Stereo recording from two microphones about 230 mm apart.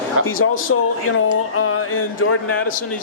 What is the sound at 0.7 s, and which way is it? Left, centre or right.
Speech, left.